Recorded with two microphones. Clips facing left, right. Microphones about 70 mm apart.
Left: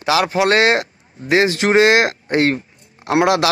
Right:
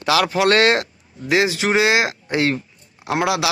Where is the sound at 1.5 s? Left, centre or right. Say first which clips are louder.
Left 4 dB; left.